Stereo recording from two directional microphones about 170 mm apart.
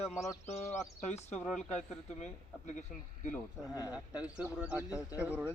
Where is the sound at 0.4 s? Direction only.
40° left (ahead or behind).